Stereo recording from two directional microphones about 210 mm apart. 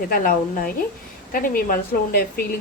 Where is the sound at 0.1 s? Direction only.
45° left (ahead or behind).